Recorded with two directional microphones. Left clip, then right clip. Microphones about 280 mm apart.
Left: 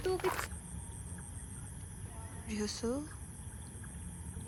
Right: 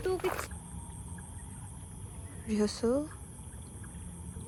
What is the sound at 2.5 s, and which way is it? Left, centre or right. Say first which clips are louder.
Speech: right 8 dB; centre.